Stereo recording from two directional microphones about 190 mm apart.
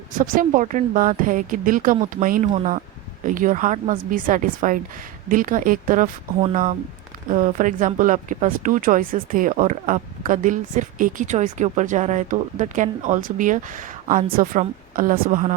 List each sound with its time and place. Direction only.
0.1 s speech: 45° right (ahead or behind)